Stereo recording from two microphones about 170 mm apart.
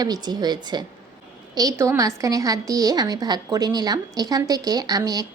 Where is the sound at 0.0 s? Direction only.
25° right (ahead or behind).